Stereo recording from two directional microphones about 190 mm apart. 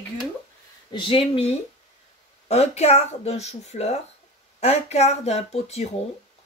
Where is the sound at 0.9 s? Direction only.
25° left (ahead or behind).